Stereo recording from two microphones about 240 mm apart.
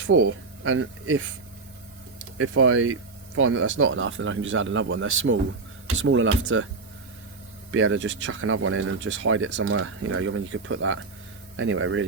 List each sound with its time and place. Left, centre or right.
0.1 s speech: right
2.4 s speech: right
7.7 s speech: right